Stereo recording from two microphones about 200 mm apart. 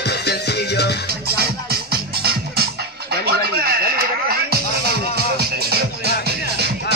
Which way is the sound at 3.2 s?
50° right (ahead or behind).